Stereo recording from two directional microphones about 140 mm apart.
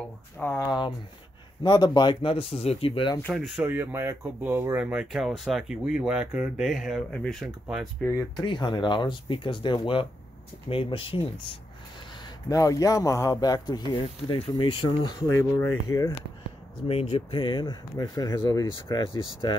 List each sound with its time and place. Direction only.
0.4 s speech: 10° left (ahead or behind)
1.6 s speech: 30° left (ahead or behind)
3.3 s speech: centre (ahead or behind)
3.6 s speech: 15° right (ahead or behind); by 8.2 s 15° left (ahead or behind)
8.4 s speech: 35° left (ahead or behind)
12.4 s speech: 25° left (ahead or behind)
16.8 s speech: 40° left (ahead or behind)